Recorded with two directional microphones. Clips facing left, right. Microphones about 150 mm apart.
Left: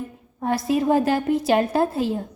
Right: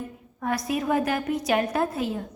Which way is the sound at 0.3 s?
30° left (ahead or behind).